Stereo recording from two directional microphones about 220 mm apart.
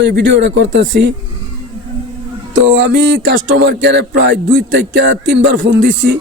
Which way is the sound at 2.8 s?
50° right (ahead or behind).